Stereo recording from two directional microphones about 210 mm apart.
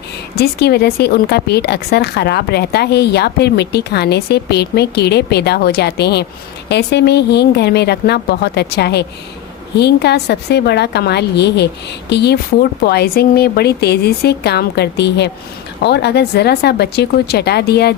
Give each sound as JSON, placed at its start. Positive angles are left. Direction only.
{"t": 0.3, "sound": "speech", "side_deg": 50}